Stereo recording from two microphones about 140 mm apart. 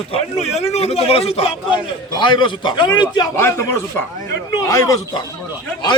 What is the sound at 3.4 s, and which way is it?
A man's voice, 20° left (ahead or behind).